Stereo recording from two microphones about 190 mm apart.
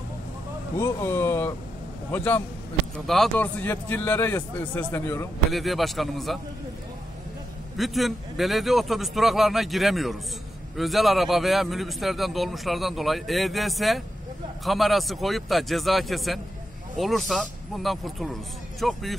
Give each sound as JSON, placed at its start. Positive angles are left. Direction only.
{"t": 0.7, "sound": "a man's voice", "side_deg": 15}
{"t": 5.5, "sound": "a man's voice", "side_deg": 0}
{"t": 7.7, "sound": "a man's voice", "side_deg": 0}